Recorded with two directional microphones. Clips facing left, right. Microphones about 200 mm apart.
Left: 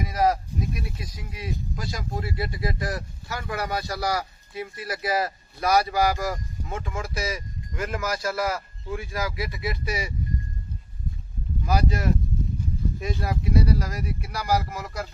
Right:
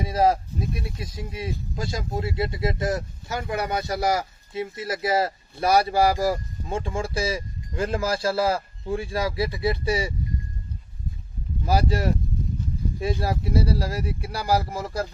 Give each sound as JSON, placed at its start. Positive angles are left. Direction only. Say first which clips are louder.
{"t": 0.0, "sound": "speech", "louder": "right 2 dB", "side_deg": -30}
{"t": 11.6, "sound": "speech", "louder": "right 2 dB", "side_deg": -35}
{"t": 13.2, "sound": "speech", "louder": "left 3 dB", "side_deg": -30}